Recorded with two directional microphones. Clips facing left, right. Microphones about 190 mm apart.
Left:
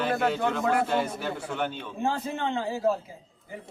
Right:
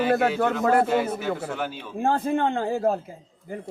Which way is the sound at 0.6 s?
45° right (ahead or behind).